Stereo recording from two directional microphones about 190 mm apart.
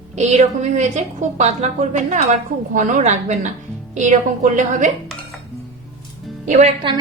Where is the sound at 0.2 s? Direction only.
35° right (ahead or behind).